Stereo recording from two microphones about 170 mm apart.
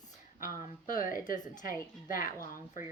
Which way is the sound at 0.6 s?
55° left (ahead or behind).